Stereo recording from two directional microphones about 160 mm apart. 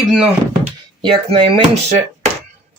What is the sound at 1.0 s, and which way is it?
Speech, 30° right (ahead or behind).